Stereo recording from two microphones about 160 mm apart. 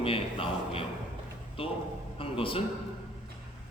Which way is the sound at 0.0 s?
35° left (ahead or behind).